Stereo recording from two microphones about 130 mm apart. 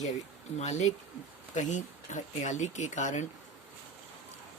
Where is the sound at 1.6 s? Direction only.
70° left (ahead or behind).